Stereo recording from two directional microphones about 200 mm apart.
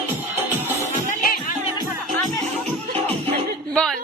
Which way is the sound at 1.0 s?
40° left (ahead or behind).